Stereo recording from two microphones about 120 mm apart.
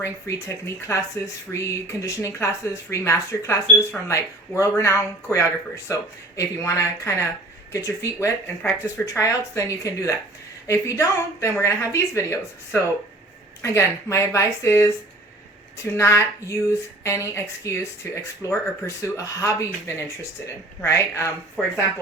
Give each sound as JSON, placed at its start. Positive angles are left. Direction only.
{"t": 0.0, "sound": "speech", "side_deg": 25}
{"t": 20.8, "sound": "speech", "side_deg": 25}